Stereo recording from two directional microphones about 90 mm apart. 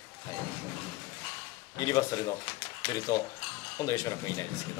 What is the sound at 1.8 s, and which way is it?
Speech, 40° left (ahead or behind).